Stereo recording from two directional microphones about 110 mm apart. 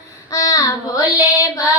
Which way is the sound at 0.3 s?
30° left (ahead or behind).